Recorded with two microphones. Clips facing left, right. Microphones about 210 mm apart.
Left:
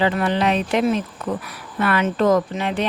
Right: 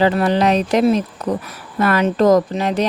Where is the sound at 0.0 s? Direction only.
35° right (ahead or behind).